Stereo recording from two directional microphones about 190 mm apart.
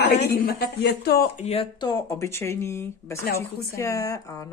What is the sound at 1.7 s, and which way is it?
Speech, 20° left (ahead or behind).